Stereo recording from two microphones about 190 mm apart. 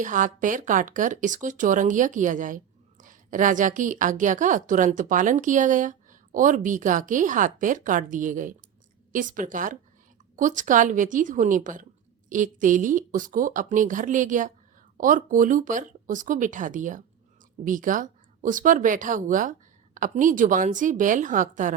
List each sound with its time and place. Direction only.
0.0 s a woman's voice: 45° right (ahead or behind)